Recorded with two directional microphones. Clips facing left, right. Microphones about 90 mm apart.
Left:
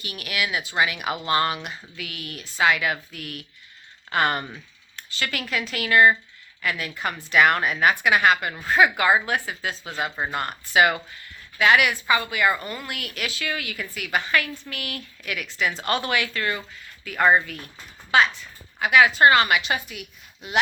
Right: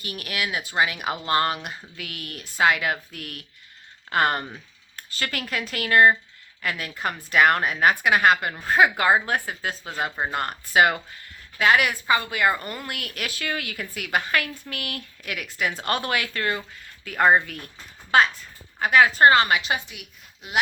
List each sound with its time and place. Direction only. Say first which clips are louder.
0.0 s a woman's voice: left 1 dB; 45° right (ahead or behind)